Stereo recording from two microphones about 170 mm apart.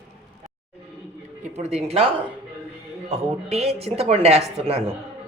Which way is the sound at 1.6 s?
40° right (ahead or behind).